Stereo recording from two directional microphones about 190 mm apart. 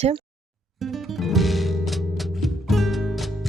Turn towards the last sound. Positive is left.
turn(degrees=0)  # may be behind; listen again after turning